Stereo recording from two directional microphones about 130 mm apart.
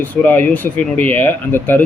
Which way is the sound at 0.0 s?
15° left (ahead or behind).